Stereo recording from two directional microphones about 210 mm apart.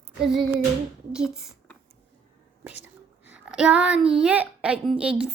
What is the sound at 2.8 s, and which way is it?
A child's voice, 5° right (ahead or behind).